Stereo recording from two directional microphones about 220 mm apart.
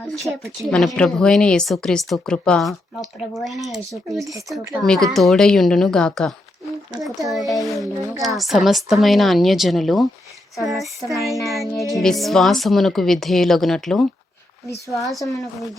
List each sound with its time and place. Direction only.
0.4 s speech: centre (ahead or behind)
4.2 s speech: 15° right (ahead or behind)
4.8 s speech: centre (ahead or behind)